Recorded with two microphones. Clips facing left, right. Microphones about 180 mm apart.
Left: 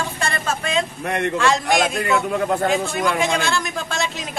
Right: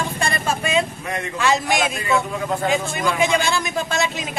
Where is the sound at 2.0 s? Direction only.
55° left (ahead or behind).